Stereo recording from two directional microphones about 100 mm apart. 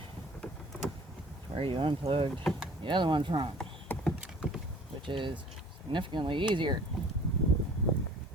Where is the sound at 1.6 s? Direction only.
60° right (ahead or behind).